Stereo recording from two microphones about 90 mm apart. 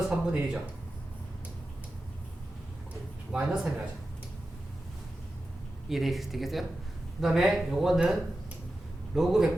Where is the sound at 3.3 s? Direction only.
5° right (ahead or behind).